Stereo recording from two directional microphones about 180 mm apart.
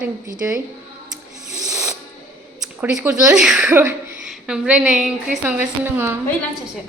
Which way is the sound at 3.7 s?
15° right (ahead or behind).